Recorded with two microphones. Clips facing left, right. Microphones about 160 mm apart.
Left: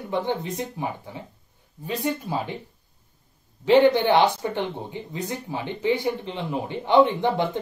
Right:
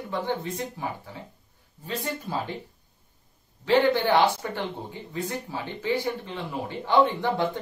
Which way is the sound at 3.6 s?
20° left (ahead or behind).